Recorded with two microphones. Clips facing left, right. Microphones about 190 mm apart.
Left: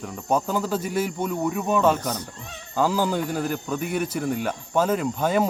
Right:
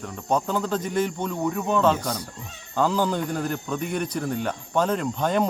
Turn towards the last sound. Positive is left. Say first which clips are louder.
# left 1 dB
turn(degrees=5)  # may be behind; listen again after turning